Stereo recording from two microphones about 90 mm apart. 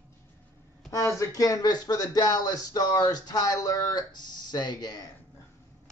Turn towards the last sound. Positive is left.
turn(degrees=45)  # may be behind; listen again after turning